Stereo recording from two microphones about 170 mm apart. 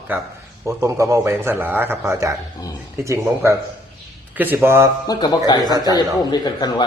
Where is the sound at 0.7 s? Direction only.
15° right (ahead or behind).